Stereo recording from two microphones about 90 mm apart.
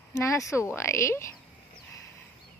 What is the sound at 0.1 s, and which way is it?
Speech, 35° left (ahead or behind).